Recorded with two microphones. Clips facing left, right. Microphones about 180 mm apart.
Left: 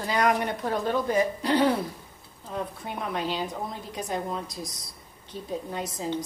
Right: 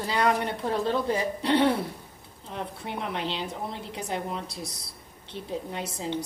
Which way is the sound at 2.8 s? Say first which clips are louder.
Even; 25° right (ahead or behind).